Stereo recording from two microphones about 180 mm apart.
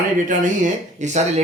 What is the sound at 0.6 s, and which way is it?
Speech, 40° right (ahead or behind).